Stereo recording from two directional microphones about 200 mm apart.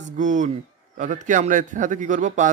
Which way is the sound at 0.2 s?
40° right (ahead or behind).